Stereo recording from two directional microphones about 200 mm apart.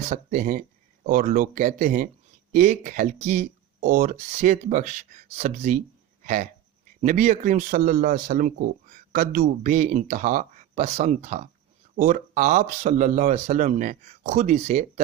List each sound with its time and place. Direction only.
0.1 s speech: 40° right (ahead or behind)